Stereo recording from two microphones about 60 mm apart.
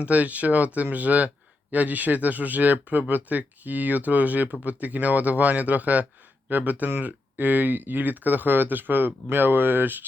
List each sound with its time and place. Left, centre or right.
0.0 s speech: right